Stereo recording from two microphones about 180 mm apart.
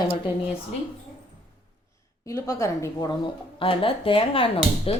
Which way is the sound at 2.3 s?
20° left (ahead or behind).